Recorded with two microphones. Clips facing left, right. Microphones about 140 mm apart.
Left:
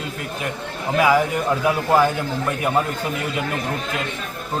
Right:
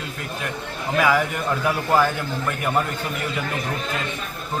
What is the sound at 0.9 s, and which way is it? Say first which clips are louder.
A man's voice: left 3 dB; 15° left (ahead or behind).